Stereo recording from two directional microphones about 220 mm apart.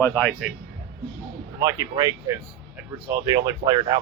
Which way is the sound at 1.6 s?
20° right (ahead or behind).